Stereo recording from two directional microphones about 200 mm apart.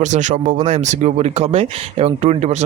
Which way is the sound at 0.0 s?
35° right (ahead or behind).